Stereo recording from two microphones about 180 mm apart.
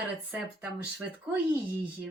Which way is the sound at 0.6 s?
10° right (ahead or behind).